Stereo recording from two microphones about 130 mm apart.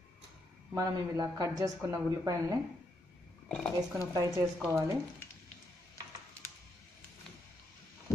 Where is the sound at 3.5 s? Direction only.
5° left (ahead or behind).